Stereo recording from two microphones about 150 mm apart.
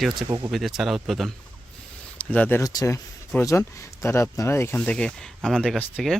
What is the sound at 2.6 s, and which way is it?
Speech, 25° left (ahead or behind).